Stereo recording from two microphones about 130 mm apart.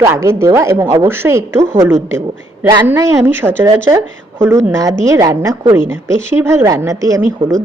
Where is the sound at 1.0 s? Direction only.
20° right (ahead or behind).